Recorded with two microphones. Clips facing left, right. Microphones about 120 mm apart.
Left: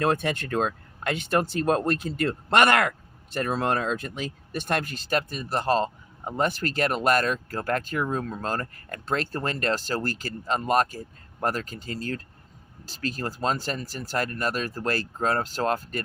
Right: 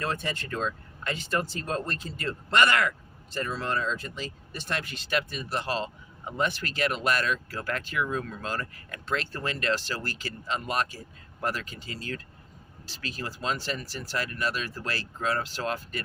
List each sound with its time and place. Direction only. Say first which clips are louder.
0.0 s speech: left 7 dB; 60° left (ahead or behind); by 16.0 s 45° left (ahead or behind)